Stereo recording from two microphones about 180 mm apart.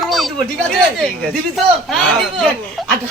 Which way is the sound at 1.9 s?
5° left (ahead or behind).